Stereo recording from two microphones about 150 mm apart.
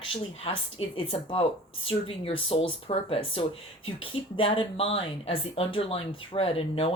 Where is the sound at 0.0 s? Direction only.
40° left (ahead or behind).